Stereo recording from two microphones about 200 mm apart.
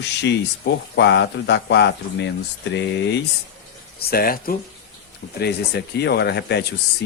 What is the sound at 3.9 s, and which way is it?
A man's voice, 45° left (ahead or behind).